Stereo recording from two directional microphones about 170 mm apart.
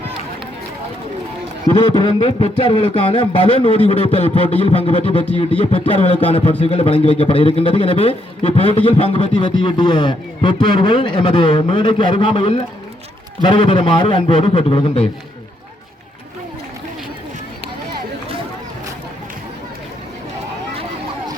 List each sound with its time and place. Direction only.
1.8 s a man's voice: 30° left (ahead or behind)